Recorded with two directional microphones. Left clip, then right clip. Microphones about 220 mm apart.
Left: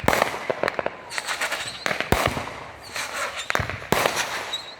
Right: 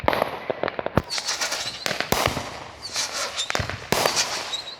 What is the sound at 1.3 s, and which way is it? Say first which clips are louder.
Fireworks: even; centre (ahead or behind).